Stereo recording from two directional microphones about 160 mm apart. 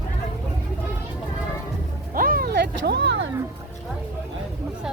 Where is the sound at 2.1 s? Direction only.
65° right (ahead or behind); by 3.1 s 90° right.